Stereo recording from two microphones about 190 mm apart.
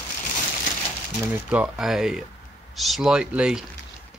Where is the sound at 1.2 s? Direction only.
10° right (ahead or behind).